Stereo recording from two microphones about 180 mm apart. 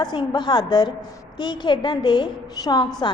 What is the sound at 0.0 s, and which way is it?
A woman's voice, 25° left (ahead or behind).